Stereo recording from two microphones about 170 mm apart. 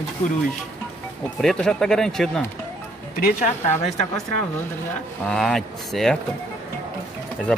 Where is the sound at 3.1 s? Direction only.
60° left (ahead or behind).